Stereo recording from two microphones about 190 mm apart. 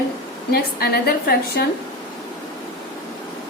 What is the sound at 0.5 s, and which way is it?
A woman's voice, 55° left (ahead or behind).